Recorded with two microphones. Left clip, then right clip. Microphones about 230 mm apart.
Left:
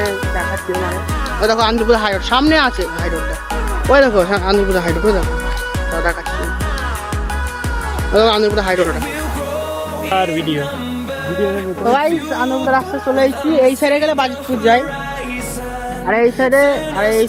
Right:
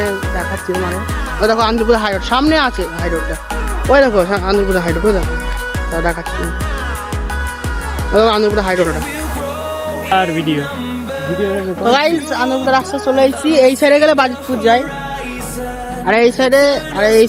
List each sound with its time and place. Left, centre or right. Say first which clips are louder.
1.4 s speech: right 1 dB; centre
3.8 s speech: right 1 dB; centre
8.1 s speech: right 1 dB; centre
10.2 s speech: right 1 dB; right
11.9 s a woman's voice: right 2 dB; centre
13.6 s speech: right 3 dB; right
13.9 s a woman's voice: right 5 dB; right
14.6 s a woman's voice: even; centre
16.0 s speech: right 2 dB; right
17.0 s a woman's voice: right 5 dB; right